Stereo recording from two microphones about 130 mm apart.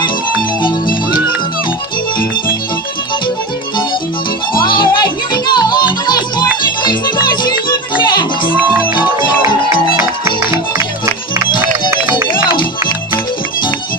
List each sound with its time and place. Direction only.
4.6 s music: 35° left (ahead or behind)
8.5 s music: 10° right (ahead or behind)
11.6 s run: 15° right (ahead or behind)